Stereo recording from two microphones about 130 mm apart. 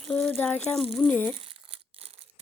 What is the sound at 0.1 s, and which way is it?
Speech, 10° left (ahead or behind).